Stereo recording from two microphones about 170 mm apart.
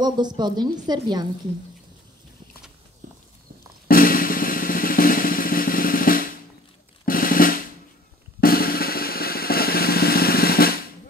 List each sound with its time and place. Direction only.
0.0 s a woman's voice: 25° right (ahead or behind)
3.0 s walk: 50° right (ahead or behind)
3.8 s drum: 55° left (ahead or behind)